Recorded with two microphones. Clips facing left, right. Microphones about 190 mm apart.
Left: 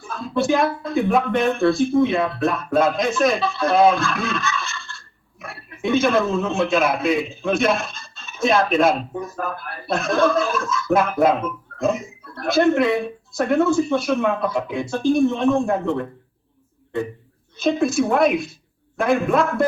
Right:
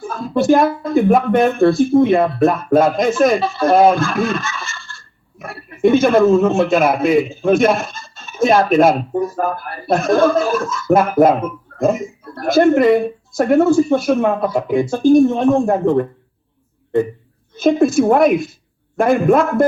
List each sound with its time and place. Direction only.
0.0 s a man's voice: 45° right (ahead or behind)
17.6 s a man's voice: 50° right (ahead or behind)